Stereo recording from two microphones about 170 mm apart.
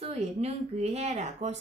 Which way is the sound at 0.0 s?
40° right (ahead or behind).